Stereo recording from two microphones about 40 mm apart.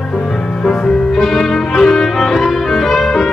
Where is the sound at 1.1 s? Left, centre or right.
Centre.